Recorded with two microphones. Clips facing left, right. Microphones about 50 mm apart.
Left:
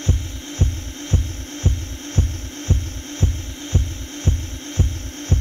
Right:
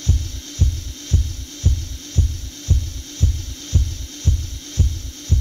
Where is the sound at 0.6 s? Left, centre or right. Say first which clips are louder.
Left 1 dB; left.